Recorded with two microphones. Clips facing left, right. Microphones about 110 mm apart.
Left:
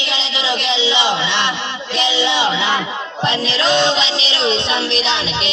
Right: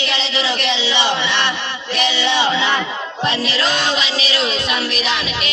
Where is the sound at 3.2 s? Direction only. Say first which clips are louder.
Left 1 dB; 25° left (ahead or behind).